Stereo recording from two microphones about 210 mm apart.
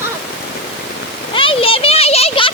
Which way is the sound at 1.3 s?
25° left (ahead or behind).